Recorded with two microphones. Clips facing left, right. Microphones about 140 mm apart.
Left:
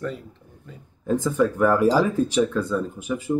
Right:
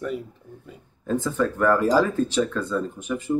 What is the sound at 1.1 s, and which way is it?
Speech, 10° left (ahead or behind).